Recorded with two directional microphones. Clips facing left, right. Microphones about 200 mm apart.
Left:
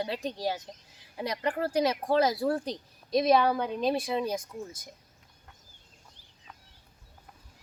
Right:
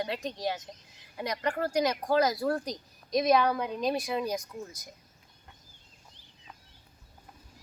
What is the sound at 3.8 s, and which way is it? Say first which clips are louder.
Speech: left 1 dB; 30° left (ahead or behind).